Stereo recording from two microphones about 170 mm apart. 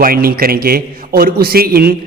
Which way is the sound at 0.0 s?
60° right (ahead or behind).